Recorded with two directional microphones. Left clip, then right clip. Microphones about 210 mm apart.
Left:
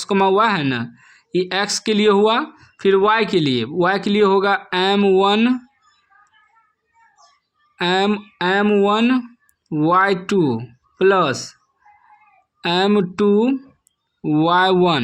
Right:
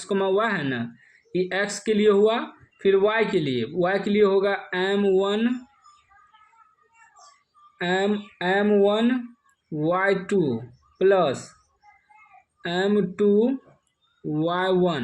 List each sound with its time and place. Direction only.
0.0 s speech: 40° left (ahead or behind)
7.8 s speech: 40° left (ahead or behind)
12.6 s speech: 40° left (ahead or behind)